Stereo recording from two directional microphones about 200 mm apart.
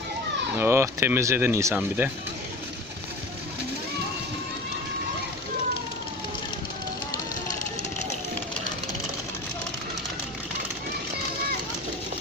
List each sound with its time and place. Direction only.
0.5 s speech: 10° right (ahead or behind)